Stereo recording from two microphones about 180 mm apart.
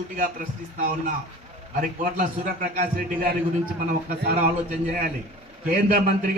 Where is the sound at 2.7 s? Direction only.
50° right (ahead or behind).